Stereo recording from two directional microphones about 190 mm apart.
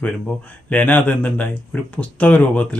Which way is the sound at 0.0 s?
10° left (ahead or behind).